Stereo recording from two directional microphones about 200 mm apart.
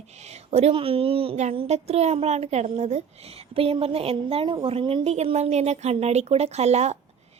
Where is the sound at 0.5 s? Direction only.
30° right (ahead or behind).